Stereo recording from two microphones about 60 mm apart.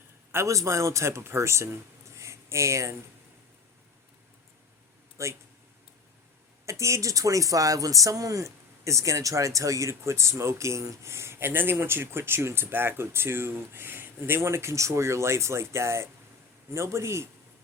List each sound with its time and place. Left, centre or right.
0.4 s speech: right
5.1 s speech: right
6.7 s speech: right